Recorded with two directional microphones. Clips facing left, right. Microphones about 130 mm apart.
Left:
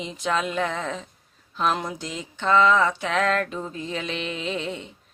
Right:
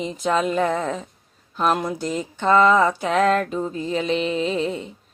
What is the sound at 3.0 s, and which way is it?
Music, 40° right (ahead or behind).